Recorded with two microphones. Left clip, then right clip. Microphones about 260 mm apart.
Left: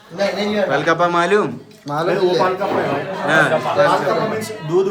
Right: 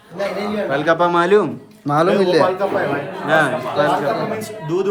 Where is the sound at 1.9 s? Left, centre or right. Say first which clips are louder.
Right 5 dB; right.